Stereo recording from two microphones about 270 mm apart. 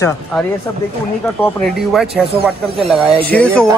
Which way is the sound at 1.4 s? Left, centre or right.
Centre.